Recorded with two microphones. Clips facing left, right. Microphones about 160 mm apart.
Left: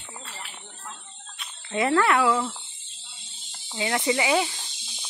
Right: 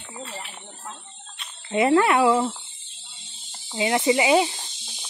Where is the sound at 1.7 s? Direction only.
20° right (ahead or behind).